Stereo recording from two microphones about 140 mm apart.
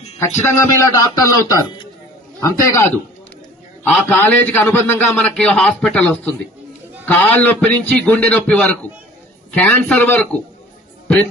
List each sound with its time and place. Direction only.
0.2 s a man's voice: 20° left (ahead or behind)
3.9 s a man's voice: 10° left (ahead or behind)